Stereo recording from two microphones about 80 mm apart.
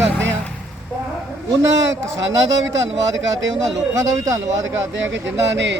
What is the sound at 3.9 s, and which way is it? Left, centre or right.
Speech, right.